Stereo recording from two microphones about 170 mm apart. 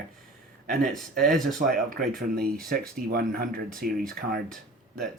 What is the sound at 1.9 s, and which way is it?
Speech, 55° right (ahead or behind).